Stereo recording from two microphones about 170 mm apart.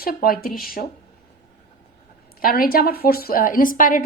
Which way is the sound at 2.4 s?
60° left (ahead or behind).